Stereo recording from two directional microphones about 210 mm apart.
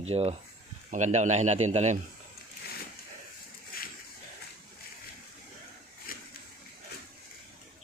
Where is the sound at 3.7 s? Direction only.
45° left (ahead or behind).